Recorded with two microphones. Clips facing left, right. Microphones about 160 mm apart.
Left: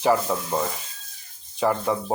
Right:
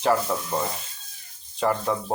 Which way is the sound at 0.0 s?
5° left (ahead or behind).